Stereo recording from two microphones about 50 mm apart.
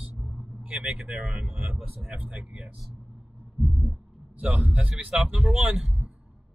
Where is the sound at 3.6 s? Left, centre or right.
Right.